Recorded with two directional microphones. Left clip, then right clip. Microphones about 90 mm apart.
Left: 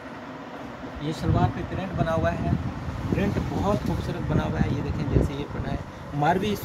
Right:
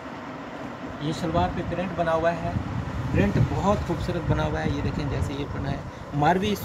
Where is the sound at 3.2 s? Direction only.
20° right (ahead or behind).